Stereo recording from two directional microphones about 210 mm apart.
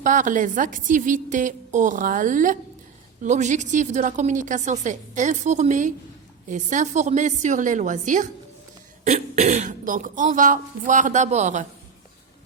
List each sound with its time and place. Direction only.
0.0 s a woman's voice: 35° right (ahead or behind)